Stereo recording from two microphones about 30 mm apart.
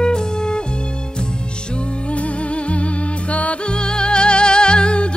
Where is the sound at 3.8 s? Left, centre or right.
Left.